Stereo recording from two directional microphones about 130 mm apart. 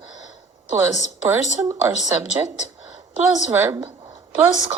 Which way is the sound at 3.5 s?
15° right (ahead or behind).